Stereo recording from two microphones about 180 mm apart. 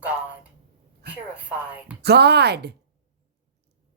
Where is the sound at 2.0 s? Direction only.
65° right (ahead or behind).